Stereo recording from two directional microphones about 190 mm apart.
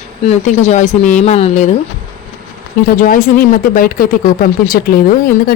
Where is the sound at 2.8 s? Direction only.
50° left (ahead or behind).